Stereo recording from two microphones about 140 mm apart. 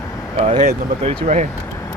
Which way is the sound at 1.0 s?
40° right (ahead or behind).